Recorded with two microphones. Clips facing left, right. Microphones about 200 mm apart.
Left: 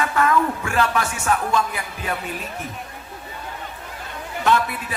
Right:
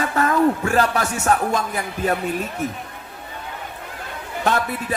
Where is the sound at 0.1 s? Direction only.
40° right (ahead or behind).